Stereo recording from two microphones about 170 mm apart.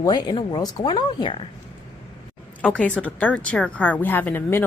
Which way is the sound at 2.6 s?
5° left (ahead or behind).